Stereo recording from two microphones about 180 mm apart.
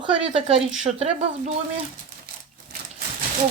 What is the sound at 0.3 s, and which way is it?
Speech, 35° right (ahead or behind).